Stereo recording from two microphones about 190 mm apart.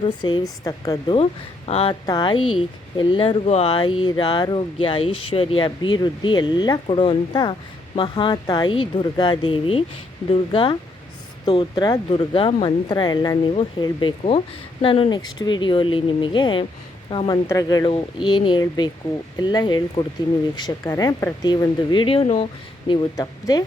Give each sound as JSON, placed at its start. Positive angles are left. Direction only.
{"t": 0.0, "sound": "speech", "side_deg": 25}